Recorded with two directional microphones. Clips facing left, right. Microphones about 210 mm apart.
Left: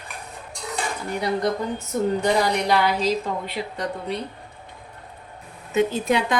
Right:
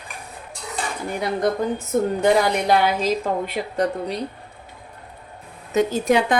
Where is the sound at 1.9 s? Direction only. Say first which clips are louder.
Right 3 dB; 55° right (ahead or behind).